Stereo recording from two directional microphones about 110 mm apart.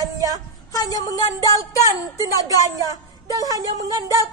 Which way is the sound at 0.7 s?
30° left (ahead or behind).